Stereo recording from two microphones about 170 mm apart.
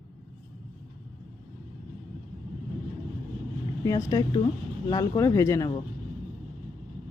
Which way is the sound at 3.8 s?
20° left (ahead or behind).